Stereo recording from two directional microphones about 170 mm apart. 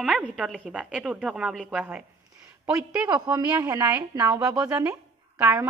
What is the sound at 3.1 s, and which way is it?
A woman's voice, 20° right (ahead or behind).